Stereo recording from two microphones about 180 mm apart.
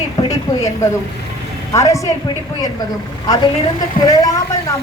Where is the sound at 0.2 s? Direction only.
20° left (ahead or behind).